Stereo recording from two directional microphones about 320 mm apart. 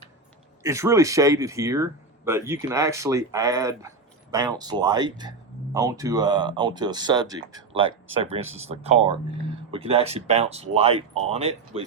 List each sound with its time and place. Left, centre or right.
0.6 s speech: centre